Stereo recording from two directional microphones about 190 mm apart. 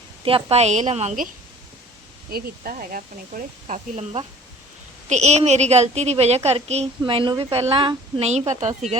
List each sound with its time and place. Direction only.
0.3 s a woman's voice: 30° right (ahead or behind)
2.3 s a woman's voice: 50° right (ahead or behind)